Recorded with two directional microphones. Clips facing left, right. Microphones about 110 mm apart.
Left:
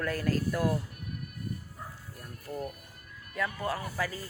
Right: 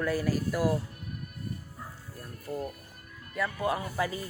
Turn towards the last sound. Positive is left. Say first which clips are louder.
# right 3 dB
turn(degrees=-20)  # may be behind; listen again after turning